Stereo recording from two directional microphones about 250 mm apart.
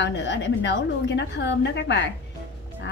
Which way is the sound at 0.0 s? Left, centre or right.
Left.